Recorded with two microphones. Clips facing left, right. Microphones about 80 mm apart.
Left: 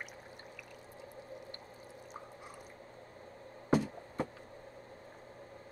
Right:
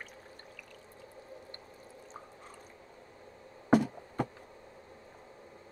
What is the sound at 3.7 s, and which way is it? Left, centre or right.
Music, right.